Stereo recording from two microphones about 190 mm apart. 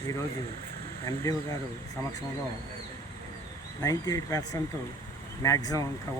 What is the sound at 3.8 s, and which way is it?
Speech, 20° left (ahead or behind).